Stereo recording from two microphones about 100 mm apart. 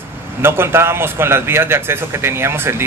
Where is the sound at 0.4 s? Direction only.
25° right (ahead or behind).